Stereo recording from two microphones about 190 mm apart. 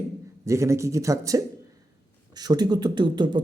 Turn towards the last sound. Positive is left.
turn(degrees=-25)  # may be behind; listen again after turning